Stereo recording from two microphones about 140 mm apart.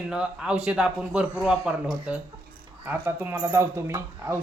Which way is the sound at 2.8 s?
15° right (ahead or behind).